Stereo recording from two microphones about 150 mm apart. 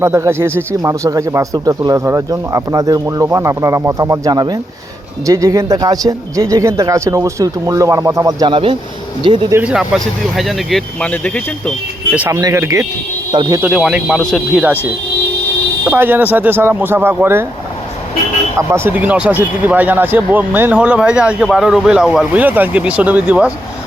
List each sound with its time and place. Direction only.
0.0 s speech: 20° right (ahead or behind)
9.5 s speech: 15° right (ahead or behind)
9.7 s speech: centre (ahead or behind)
12.1 s speech: 10° right (ahead or behind)
13.3 s speech: 30° right (ahead or behind)
13.6 s speech: 5° right (ahead or behind)
15.9 s speech: 15° right (ahead or behind)
18.5 s speech: 15° right (ahead or behind)